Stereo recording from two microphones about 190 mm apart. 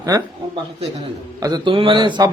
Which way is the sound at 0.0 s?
20° right (ahead or behind).